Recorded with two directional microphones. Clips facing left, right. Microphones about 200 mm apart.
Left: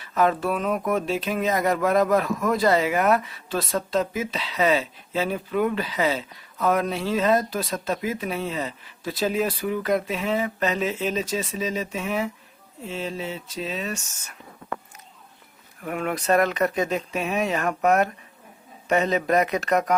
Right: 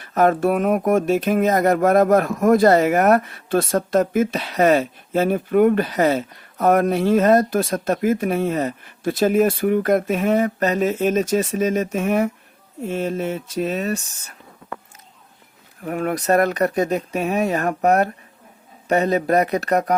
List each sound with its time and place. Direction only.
0.0 s speech: 50° right (ahead or behind)
15.8 s speech: 35° right (ahead or behind)